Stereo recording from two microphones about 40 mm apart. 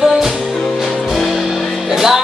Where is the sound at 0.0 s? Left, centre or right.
Centre.